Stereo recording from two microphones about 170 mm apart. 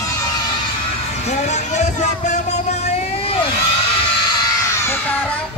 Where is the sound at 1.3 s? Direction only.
40° left (ahead or behind).